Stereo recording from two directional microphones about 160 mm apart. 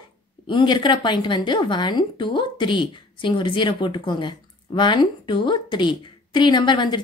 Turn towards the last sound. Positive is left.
turn(degrees=30)  # may be behind; listen again after turning